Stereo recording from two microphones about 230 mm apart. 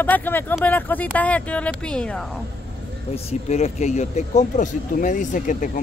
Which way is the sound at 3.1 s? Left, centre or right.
Left.